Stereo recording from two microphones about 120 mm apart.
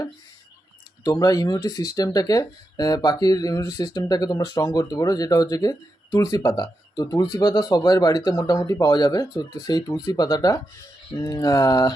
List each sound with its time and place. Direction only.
1.0 s speech: 30° left (ahead or behind)